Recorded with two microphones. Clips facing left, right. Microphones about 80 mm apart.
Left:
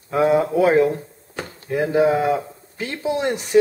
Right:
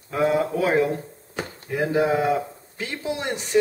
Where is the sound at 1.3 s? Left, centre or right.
Centre.